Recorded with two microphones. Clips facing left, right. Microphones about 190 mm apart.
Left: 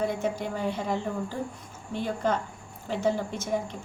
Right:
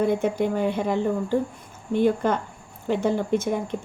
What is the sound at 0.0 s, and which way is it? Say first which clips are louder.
Speech: right 7 dB; 60° right (ahead or behind).